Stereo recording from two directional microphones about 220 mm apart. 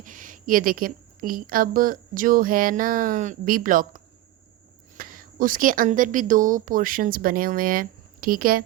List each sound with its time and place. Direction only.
0.0 s a woman's voice: 40° right (ahead or behind)